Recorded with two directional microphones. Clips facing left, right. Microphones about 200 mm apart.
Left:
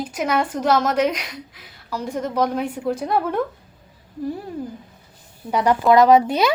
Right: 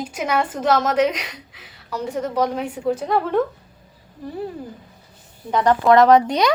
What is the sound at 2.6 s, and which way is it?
Speech, 5° right (ahead or behind).